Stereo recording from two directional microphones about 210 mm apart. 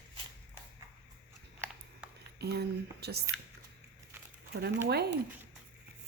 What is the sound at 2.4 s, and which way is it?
Speech, 50° right (ahead or behind).